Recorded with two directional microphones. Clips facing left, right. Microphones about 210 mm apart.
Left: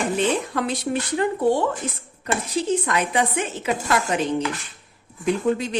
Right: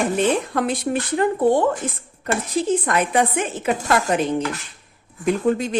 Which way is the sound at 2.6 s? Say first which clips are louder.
Right 3 dB; 50° right (ahead or behind).